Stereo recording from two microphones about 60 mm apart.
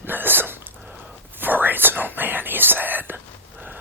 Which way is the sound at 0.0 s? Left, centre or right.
Right.